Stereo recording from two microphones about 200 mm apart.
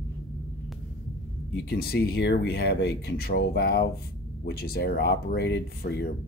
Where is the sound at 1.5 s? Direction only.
55° left (ahead or behind).